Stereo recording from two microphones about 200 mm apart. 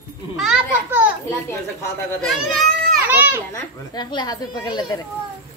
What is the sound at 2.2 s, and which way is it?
Speech, centre (ahead or behind).